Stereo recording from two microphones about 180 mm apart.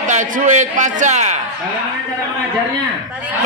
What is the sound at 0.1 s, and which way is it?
A man's voice, 45° right (ahead or behind).